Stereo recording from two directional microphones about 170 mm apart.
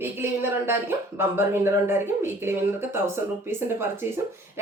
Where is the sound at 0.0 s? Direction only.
15° right (ahead or behind).